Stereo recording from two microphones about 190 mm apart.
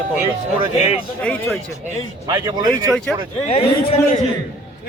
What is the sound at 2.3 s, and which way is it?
Speech, 20° right (ahead or behind).